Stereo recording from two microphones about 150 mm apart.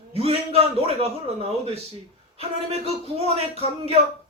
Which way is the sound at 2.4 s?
40° right (ahead or behind).